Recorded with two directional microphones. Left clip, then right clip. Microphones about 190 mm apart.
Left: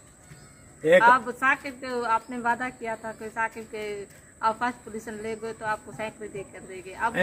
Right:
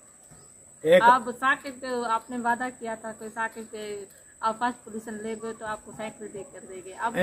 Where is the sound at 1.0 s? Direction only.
25° left (ahead or behind).